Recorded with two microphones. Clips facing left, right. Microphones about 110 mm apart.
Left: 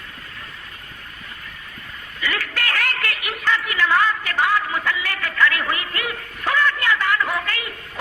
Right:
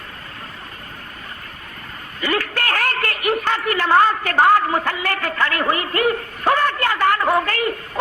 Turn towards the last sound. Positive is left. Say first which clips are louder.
# right 8 dB
turn(degrees=-45)  # may be behind; listen again after turning